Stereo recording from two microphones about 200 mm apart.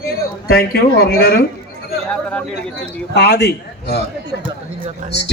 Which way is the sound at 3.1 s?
55° left (ahead or behind).